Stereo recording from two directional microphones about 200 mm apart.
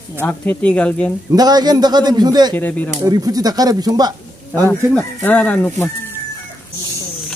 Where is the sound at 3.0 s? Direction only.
20° right (ahead or behind).